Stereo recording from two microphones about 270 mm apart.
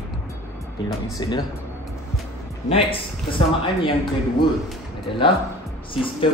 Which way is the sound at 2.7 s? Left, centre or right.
Centre.